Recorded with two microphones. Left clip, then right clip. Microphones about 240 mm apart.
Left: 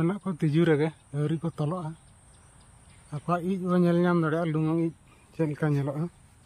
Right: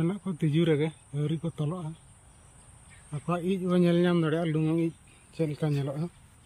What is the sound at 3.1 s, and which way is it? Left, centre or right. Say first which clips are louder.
Speech: left 2 dB; centre.